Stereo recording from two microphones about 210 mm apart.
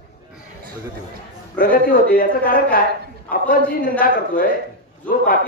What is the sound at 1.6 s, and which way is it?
A man's voice, 40° left (ahead or behind).